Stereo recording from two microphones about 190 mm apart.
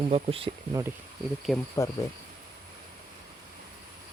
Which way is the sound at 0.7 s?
15° right (ahead or behind).